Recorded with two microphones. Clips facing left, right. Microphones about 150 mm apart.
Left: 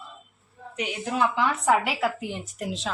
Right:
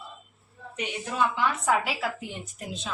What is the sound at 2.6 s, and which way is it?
Speech, 75° left (ahead or behind).